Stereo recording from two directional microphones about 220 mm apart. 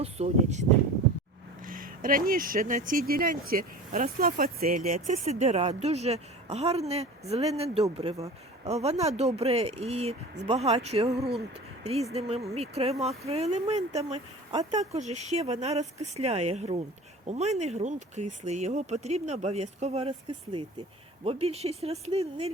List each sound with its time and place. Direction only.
0.0 s speech: 30° right (ahead or behind)
1.6 s speech: 40° right (ahead or behind)